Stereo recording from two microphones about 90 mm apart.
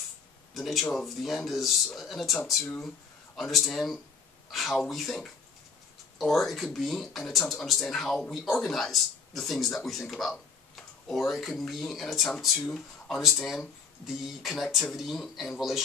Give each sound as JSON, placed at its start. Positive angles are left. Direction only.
{"t": 0.6, "sound": "speech", "side_deg": 0}